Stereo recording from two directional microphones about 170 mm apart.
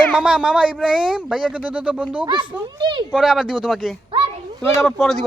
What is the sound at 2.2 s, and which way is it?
Speech, 30° right (ahead or behind).